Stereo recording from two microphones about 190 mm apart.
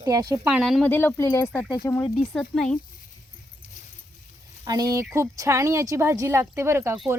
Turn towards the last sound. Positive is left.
turn(degrees=-15)  # may be behind; listen again after turning